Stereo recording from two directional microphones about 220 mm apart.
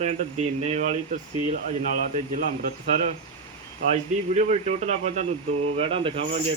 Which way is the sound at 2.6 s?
30° right (ahead or behind).